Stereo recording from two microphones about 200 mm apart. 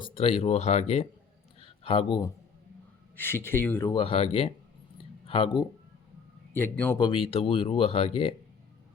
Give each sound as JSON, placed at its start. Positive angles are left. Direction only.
{"t": 0.0, "sound": "a man's voice", "side_deg": 30}
{"t": 3.2, "sound": "speech", "side_deg": 10}
{"t": 3.8, "sound": "speech", "side_deg": 25}
{"t": 6.5, "sound": "a man's voice", "side_deg": 10}
{"t": 7.0, "sound": "speech", "side_deg": 25}